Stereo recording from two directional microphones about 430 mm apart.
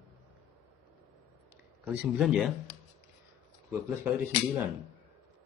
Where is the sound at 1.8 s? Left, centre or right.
Centre.